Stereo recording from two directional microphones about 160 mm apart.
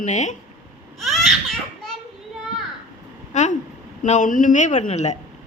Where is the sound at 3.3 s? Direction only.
50° left (ahead or behind).